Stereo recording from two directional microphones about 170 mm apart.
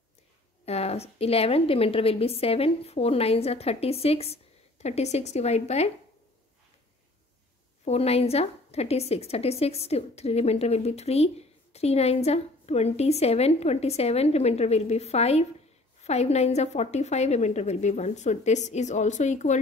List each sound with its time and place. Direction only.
0.7 s a woman's voice: 40° left (ahead or behind)
7.8 s a woman's voice: 40° left (ahead or behind)